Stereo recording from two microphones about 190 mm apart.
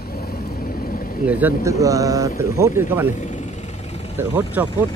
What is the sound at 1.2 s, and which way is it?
Speech, 10° right (ahead or behind).